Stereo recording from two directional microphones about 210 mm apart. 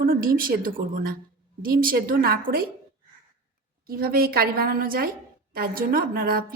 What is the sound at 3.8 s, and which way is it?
A woman's voice, 45° right (ahead or behind).